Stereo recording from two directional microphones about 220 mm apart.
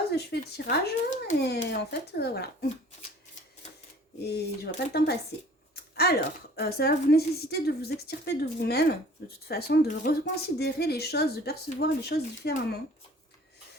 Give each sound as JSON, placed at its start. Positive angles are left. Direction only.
{"t": 0.2, "sound": "speech", "side_deg": 50}
{"t": 4.3, "sound": "speech", "side_deg": 45}